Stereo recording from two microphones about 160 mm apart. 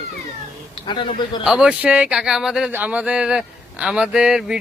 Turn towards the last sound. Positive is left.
turn(degrees=-5)  # may be behind; listen again after turning